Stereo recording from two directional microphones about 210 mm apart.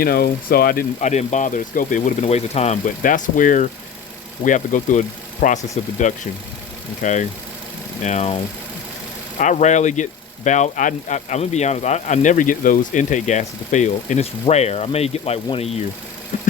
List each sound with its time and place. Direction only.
0.0 s speech: 45° left (ahead or behind)
9.4 s speech: 35° left (ahead or behind)